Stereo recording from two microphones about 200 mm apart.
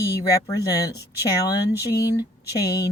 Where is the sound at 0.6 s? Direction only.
15° left (ahead or behind).